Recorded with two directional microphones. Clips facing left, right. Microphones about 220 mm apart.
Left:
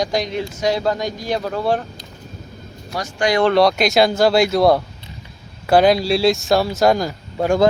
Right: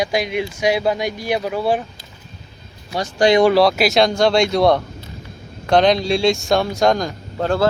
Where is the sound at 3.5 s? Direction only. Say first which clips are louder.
Even; centre (ahead or behind).